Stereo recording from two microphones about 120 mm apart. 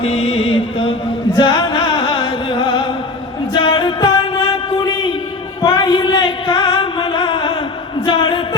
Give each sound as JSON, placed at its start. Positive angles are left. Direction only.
{"t": 0.0, "sound": "chant", "side_deg": 55}
{"t": 3.5, "sound": "music", "side_deg": 40}
{"t": 5.6, "sound": "music", "side_deg": 35}
{"t": 8.0, "sound": "a sound", "side_deg": 40}